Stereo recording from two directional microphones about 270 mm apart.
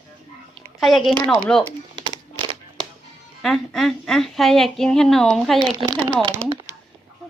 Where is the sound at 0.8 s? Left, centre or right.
Centre.